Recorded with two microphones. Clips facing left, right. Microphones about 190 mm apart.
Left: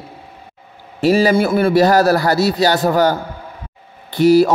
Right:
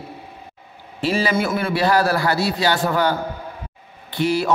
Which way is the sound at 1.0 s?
40° left (ahead or behind).